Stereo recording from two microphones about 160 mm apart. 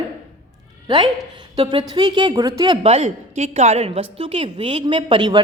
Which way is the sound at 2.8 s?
40° right (ahead or behind).